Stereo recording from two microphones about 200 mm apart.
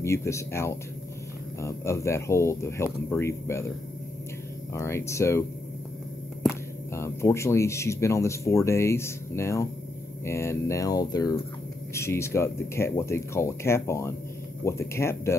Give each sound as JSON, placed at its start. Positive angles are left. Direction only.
{"t": 0.0, "sound": "speech", "side_deg": 15}
{"t": 4.7, "sound": "speech", "side_deg": 15}
{"t": 7.0, "sound": "speech", "side_deg": 15}